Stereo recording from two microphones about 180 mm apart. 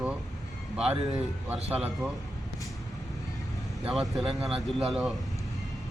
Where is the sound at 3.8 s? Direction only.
Centre (ahead or behind).